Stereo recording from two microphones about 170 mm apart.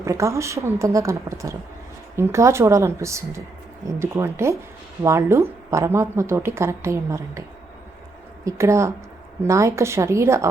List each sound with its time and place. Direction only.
0.0 s a woman's voice: 15° right (ahead or behind)
8.4 s a woman's voice: 15° right (ahead or behind)